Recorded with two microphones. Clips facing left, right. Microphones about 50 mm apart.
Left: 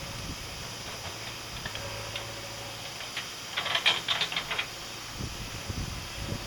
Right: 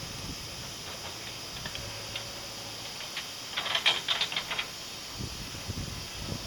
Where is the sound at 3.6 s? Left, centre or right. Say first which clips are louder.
Left 1 dB; centre.